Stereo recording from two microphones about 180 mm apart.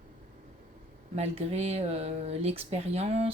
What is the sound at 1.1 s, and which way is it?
Speech, 35° right (ahead or behind).